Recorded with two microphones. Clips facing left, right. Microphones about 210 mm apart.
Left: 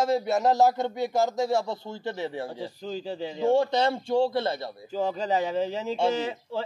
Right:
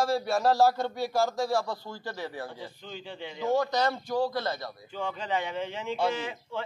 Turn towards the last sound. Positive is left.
turn(degrees=30)  # may be behind; listen again after turning